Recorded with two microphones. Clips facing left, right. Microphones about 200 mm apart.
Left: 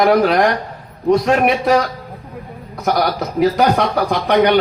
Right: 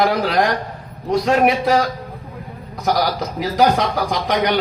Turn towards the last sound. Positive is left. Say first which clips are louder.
# left 5 dB
turn(degrees=60)  # may be behind; listen again after turning